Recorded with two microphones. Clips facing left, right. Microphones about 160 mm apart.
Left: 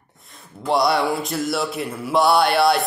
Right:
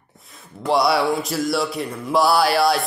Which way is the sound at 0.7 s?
Centre (ahead or behind).